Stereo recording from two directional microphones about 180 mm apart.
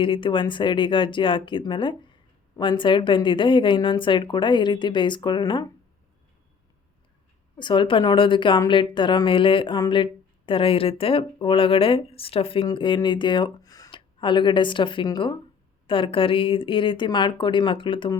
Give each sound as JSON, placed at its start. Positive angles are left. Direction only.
{"t": 0.0, "sound": "a woman's voice", "side_deg": 30}
{"t": 7.6, "sound": "a woman's voice", "side_deg": 25}